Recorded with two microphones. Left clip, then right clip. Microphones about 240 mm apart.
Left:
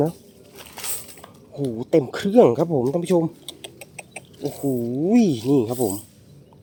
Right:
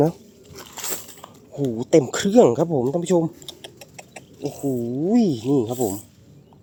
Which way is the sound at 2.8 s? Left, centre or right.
Centre.